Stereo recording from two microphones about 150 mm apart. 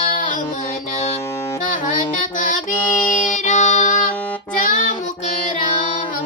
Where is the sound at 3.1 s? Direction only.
55° left (ahead or behind).